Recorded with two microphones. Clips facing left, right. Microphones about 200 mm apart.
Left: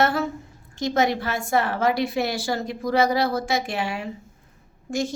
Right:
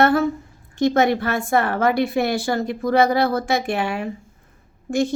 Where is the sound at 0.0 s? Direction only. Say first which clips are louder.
Right 5 dB; 55° right (ahead or behind).